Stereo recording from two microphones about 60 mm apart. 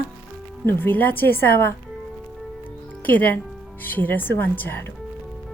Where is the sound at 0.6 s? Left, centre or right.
Left.